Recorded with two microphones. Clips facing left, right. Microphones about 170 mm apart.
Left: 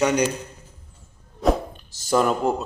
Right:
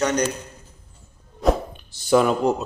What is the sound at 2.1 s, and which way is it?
Speech, 5° right (ahead or behind).